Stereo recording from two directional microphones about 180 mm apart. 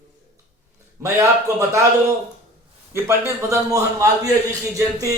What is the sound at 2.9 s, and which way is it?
Speech, 15° right (ahead or behind).